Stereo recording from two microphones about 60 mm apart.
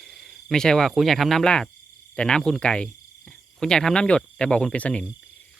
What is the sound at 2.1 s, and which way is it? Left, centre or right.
Speech, centre.